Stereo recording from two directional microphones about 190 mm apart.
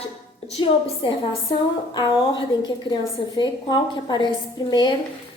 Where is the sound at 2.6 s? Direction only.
20° left (ahead or behind).